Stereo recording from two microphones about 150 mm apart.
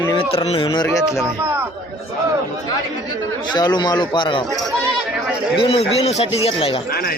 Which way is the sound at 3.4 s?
30° left (ahead or behind).